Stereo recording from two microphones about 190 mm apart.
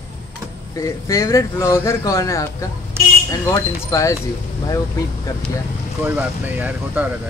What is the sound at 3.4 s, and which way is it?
Speech, 15° left (ahead or behind).